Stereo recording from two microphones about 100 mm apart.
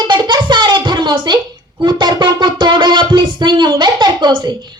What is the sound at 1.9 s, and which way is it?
Music, 50° right (ahead or behind).